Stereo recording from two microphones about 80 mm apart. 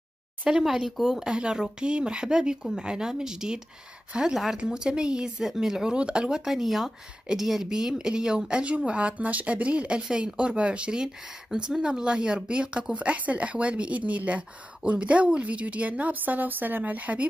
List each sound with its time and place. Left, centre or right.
0.5 s speech: centre